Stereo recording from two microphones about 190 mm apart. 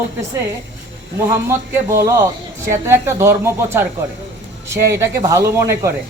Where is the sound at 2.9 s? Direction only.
15° right (ahead or behind).